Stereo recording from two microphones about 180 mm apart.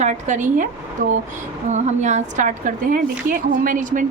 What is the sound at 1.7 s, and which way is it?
A woman's voice, 40° right (ahead or behind).